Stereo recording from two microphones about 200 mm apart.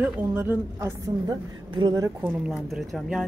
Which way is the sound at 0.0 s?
10° right (ahead or behind).